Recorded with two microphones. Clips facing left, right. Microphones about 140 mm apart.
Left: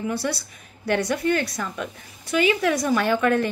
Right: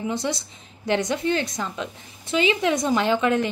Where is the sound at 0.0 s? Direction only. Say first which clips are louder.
Even; 20° right (ahead or behind).